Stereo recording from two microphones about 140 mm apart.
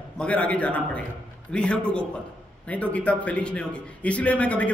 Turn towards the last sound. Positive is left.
turn(degrees=10)  # may be behind; listen again after turning